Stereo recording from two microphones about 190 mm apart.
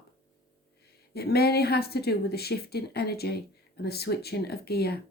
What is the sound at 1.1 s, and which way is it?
Speech, 55° left (ahead or behind).